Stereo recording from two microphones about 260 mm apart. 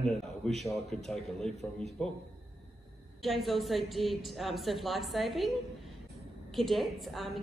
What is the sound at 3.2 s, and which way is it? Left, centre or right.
A man's voice, centre.